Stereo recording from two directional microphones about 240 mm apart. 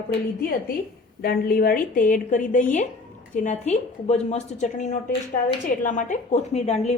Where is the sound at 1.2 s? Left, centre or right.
Left.